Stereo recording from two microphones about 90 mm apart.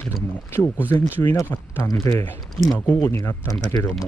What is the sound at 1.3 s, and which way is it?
Speech, 40° left (ahead or behind).